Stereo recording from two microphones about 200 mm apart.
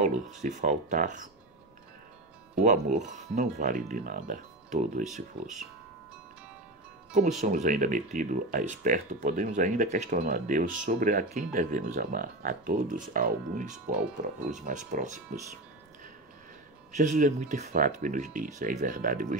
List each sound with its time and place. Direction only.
0.0 s speech: 35° right (ahead or behind)
2.6 s speech: 35° right (ahead or behind)
7.1 s speech: 35° right (ahead or behind)
16.9 s speech: 35° right (ahead or behind)